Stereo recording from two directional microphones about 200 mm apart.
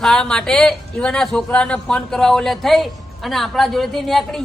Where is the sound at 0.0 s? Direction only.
5° left (ahead or behind).